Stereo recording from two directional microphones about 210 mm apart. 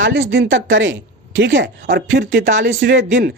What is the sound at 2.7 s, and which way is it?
Speech, 50° right (ahead or behind).